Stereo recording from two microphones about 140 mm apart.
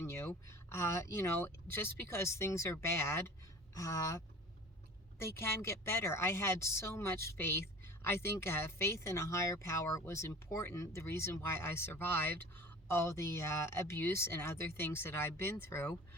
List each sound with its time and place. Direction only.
0.0 s a sound: 20° left (ahead or behind)
0.4 s speech: 20° left (ahead or behind)
5.2 s speech: 20° left (ahead or behind)